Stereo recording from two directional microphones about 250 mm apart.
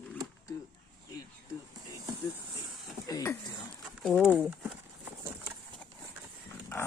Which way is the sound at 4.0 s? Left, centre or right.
Centre.